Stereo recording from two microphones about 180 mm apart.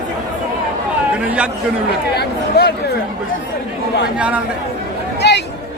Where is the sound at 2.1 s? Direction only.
65° left (ahead or behind).